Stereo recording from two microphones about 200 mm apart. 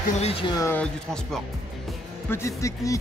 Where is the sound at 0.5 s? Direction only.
10° left (ahead or behind).